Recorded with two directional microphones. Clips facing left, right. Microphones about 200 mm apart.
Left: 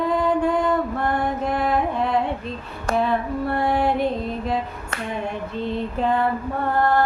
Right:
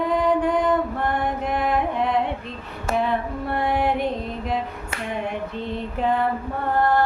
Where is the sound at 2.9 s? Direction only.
20° right (ahead or behind).